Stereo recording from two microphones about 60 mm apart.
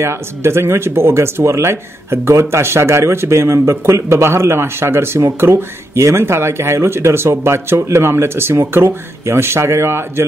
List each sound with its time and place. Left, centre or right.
0.0 s speech: right